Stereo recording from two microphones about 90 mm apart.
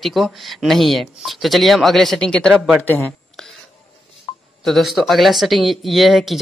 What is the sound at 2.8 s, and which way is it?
Speech, 20° left (ahead or behind).